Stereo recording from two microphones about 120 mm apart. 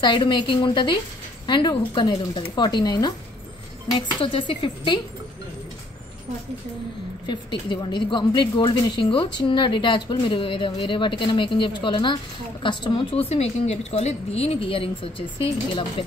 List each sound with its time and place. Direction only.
0.0 s speech: 40° left (ahead or behind)
3.9 s a woman's voice: 45° left (ahead or behind)
7.2 s a woman's voice: 40° left (ahead or behind)